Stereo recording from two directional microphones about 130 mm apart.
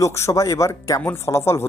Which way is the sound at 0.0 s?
20° left (ahead or behind).